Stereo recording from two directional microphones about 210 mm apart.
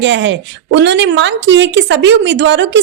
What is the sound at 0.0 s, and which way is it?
Speech, 60° right (ahead or behind).